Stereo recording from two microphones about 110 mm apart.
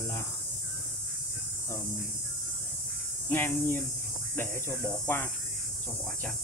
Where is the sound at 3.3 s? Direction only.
20° left (ahead or behind).